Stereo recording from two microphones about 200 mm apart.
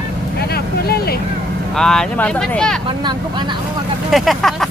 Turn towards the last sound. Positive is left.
turn(degrees=0)  # may be behind; listen again after turning